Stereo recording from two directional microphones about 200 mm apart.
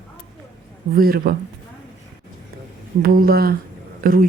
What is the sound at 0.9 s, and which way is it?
Speech, 45° right (ahead or behind).